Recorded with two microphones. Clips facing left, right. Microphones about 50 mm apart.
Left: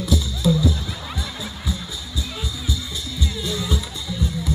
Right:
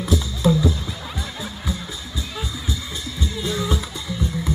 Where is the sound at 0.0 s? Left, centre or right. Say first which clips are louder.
Right 1 dB; right.